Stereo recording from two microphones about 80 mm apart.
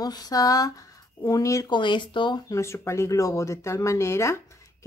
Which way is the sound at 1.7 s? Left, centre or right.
Left.